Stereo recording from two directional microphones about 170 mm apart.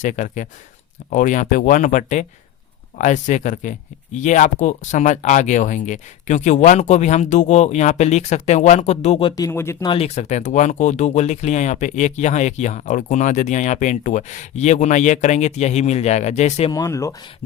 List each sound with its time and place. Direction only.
0.0 s speech: 45° left (ahead or behind)
9.3 s speech: 15° left (ahead or behind)
9.8 s speech: 35° left (ahead or behind)
16.7 s speech: 20° left (ahead or behind)